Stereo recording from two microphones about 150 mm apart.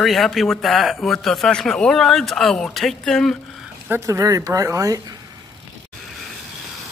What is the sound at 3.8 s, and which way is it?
Speech, 20° right (ahead or behind).